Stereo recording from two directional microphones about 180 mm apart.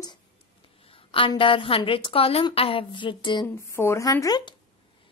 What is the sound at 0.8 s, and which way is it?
A woman's voice, 30° left (ahead or behind).